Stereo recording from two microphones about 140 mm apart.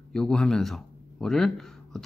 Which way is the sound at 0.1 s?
5° left (ahead or behind).